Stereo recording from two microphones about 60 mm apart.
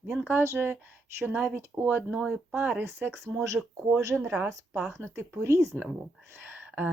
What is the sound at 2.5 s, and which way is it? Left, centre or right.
Speech, right.